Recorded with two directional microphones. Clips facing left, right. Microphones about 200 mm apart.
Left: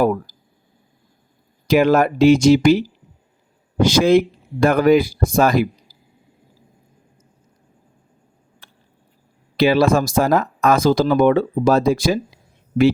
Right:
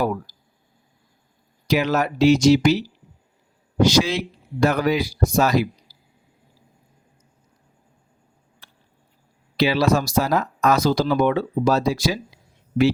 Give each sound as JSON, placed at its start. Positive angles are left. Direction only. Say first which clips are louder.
{"t": 1.6, "sound": "speech", "louder": "left 6 dB", "side_deg": 50}
{"t": 8.6, "sound": "a sound", "louder": "left 2 dB", "side_deg": 50}
{"t": 9.6, "sound": "speech", "louder": "left 4 dB", "side_deg": 50}